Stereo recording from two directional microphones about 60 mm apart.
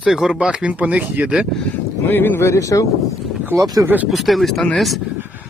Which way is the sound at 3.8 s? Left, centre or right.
Right.